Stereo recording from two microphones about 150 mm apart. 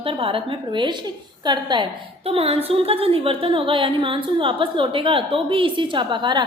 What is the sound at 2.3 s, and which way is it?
A woman's voice, 40° right (ahead or behind).